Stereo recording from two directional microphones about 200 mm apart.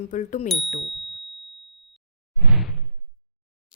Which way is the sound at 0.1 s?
40° left (ahead or behind).